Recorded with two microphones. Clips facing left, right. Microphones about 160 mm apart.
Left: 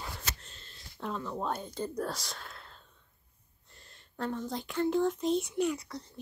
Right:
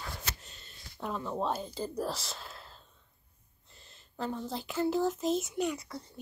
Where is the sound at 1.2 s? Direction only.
25° right (ahead or behind).